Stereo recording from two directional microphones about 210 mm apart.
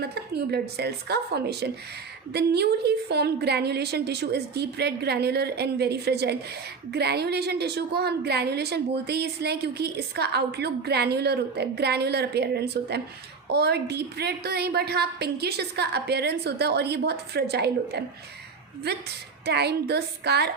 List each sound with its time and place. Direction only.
0.0 s a woman's voice: 50° right (ahead or behind)